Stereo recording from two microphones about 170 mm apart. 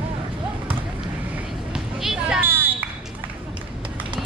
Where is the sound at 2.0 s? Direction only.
5° right (ahead or behind).